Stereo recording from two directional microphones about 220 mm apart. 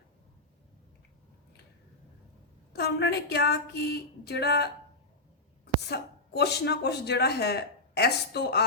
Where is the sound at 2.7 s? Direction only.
50° left (ahead or behind).